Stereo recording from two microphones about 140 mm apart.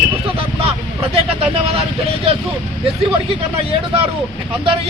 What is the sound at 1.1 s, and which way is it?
Speech, 40° right (ahead or behind).